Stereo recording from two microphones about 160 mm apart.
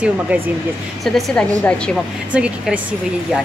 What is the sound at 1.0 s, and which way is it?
Speech, centre (ahead or behind).